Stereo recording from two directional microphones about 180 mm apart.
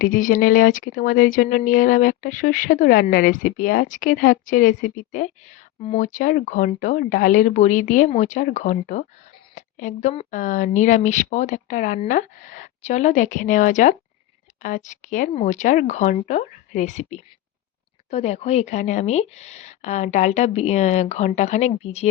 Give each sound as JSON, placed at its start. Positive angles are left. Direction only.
{"t": 0.0, "sound": "a woman's voice", "side_deg": 45}